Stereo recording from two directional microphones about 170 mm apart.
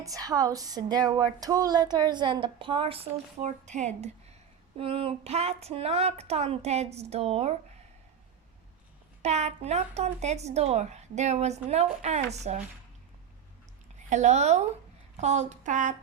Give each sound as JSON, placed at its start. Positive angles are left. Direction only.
{"t": 0.0, "sound": "a sound", "side_deg": -20}
{"t": 4.8, "sound": "a child's voice", "side_deg": -30}
{"t": 9.2, "sound": "a child's voice", "side_deg": -40}
{"t": 14.1, "sound": "speech", "side_deg": -45}